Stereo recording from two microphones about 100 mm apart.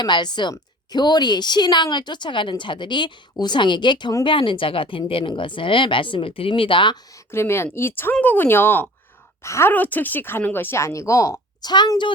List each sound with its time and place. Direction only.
0.0 s a woman's voice: 50° left (ahead or behind)
7.3 s speech: 25° left (ahead or behind)
11.7 s a woman's voice: 45° left (ahead or behind)